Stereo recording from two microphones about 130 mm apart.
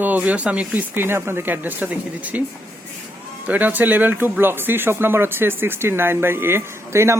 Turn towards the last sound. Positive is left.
turn(degrees=-20)  # may be behind; listen again after turning